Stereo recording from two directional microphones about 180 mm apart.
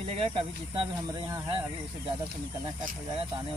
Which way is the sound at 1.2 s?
20° right (ahead or behind).